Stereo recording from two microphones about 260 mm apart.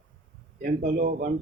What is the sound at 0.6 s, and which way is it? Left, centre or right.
Speech, right.